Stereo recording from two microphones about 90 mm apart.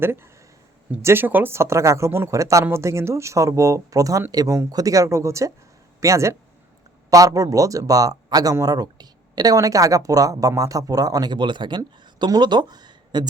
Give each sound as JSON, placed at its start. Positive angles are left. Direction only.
{"t": 0.0, "sound": "speech", "side_deg": -25}